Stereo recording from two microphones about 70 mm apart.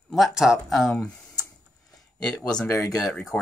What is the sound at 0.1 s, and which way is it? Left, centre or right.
Speech, centre.